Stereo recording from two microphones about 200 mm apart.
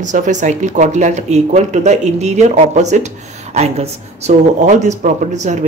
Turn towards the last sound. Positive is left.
turn(degrees=-35)  # may be behind; listen again after turning